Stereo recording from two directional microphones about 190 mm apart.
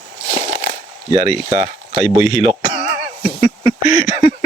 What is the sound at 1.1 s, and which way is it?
Speech, 30° right (ahead or behind).